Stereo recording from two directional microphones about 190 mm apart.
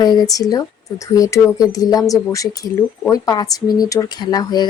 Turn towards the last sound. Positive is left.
turn(degrees=20)  # may be behind; listen again after turning